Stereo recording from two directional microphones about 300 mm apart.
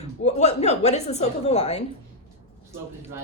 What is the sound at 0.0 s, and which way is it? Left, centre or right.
A woman's voice, left.